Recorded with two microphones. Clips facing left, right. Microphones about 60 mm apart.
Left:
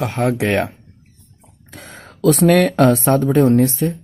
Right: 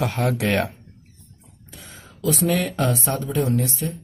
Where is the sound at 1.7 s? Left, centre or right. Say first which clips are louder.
Left 6 dB; left.